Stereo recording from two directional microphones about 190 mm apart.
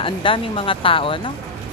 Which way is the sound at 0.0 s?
25° left (ahead or behind).